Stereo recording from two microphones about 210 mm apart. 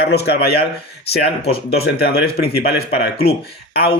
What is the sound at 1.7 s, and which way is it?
Speech, 50° left (ahead or behind).